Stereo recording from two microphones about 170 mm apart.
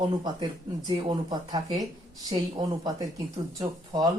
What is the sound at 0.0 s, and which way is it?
Speech, 30° right (ahead or behind).